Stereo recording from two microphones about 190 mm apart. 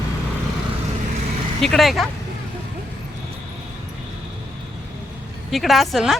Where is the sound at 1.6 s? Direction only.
Centre (ahead or behind).